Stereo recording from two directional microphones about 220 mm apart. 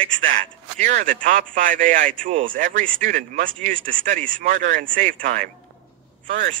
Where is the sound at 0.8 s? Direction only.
35° right (ahead or behind).